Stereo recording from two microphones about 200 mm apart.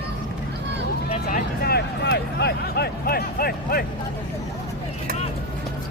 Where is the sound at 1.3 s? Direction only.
50° left (ahead or behind).